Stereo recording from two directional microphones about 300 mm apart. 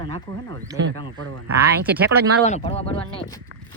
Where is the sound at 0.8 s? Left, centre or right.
Right.